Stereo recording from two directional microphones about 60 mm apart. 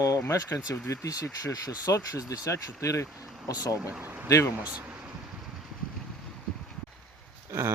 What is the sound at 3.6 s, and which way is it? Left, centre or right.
Speech, left.